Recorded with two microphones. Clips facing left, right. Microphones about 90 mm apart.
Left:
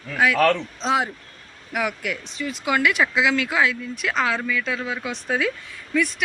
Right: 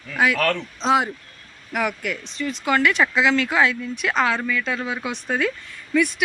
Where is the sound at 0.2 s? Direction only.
Centre (ahead or behind).